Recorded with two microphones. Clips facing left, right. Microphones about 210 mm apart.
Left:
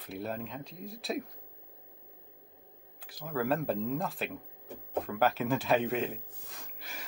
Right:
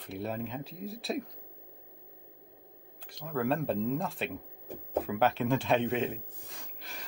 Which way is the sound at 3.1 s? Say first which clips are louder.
Even; 5° left (ahead or behind).